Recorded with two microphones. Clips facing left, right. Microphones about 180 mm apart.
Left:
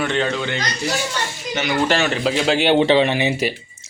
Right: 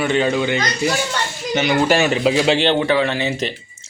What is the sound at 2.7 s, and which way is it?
Speech, 20° left (ahead or behind).